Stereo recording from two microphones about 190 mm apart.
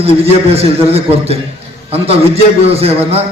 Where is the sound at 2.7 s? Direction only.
30° right (ahead or behind).